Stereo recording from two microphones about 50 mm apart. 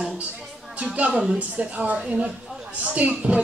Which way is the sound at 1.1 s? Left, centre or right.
Centre.